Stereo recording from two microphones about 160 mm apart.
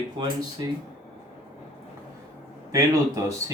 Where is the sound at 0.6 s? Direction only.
25° right (ahead or behind).